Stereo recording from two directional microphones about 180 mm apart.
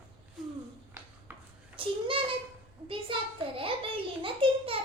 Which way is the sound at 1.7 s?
30° right (ahead or behind).